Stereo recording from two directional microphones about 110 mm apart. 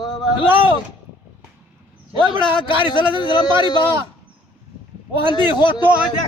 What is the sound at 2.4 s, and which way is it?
A man's voice, 50° left (ahead or behind).